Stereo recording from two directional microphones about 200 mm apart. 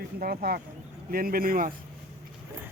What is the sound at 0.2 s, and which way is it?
A man's voice, 50° right (ahead or behind).